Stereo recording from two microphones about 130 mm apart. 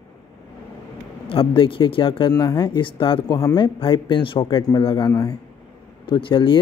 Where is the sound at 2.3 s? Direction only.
30° left (ahead or behind).